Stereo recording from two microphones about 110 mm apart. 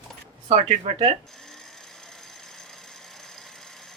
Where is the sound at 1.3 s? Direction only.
5° left (ahead or behind).